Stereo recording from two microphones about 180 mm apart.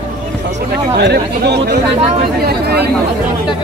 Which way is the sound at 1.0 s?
70° right (ahead or behind).